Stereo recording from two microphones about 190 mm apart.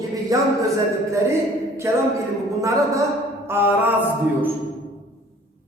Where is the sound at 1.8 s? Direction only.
15° right (ahead or behind).